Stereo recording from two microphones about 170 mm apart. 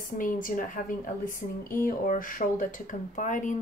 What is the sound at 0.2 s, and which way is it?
Speech, 50° left (ahead or behind).